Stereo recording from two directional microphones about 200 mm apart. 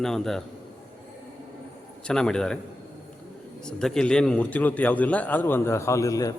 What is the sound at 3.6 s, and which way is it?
A man's voice, 5° left (ahead or behind).